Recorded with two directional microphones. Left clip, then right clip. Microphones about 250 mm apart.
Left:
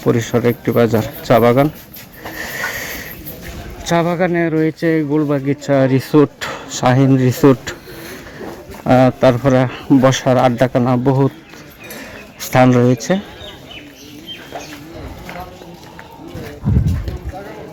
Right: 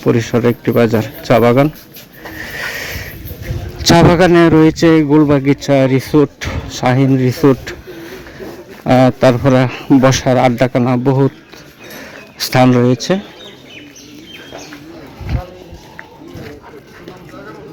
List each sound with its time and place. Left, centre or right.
0.0 s a man's voice: centre
2.4 s a sound: centre
3.9 s speech: right; by 7.8 s centre
8.8 s a man's voice: centre
12.5 s speech: centre